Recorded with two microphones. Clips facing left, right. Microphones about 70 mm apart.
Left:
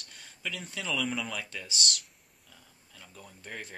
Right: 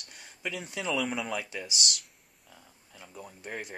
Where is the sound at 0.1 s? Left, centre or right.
Centre.